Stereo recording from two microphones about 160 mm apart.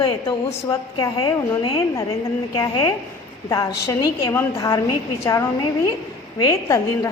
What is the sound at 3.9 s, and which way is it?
Speech, 25° left (ahead or behind).